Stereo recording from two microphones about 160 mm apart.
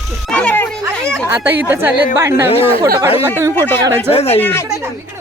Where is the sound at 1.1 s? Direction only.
15° right (ahead or behind).